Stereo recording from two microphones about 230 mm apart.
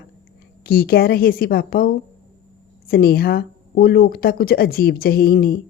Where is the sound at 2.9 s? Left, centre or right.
Left.